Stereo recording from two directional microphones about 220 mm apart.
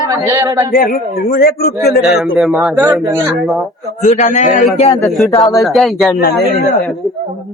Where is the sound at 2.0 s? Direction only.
Centre (ahead or behind).